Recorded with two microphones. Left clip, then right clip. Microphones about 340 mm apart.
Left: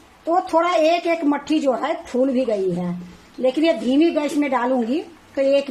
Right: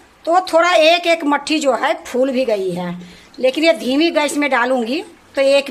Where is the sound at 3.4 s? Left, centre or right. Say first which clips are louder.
Right 4 dB; right.